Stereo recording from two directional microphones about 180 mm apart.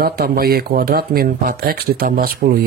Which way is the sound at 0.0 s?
60° right (ahead or behind).